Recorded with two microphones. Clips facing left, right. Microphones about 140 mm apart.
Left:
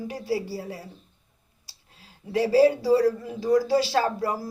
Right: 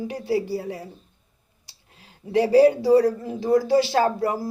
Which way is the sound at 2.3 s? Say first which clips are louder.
Right 3 dB; 20° right (ahead or behind).